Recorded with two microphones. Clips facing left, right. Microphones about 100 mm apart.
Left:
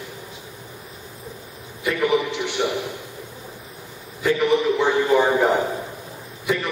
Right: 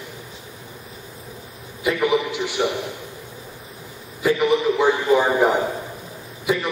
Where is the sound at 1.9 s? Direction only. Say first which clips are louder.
Right 1 dB; centre (ahead or behind).